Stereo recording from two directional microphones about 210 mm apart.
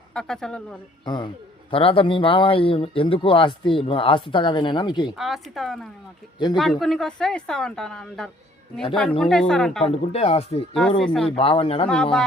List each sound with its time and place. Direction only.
0.1 s a woman's voice: 5° left (ahead or behind)
1.0 s speech: 20° left (ahead or behind)
5.1 s a woman's voice: centre (ahead or behind)
9.8 s speech: 30° left (ahead or behind)
11.0 s a woman's voice: 5° left (ahead or behind)
11.3 s speech: 25° left (ahead or behind)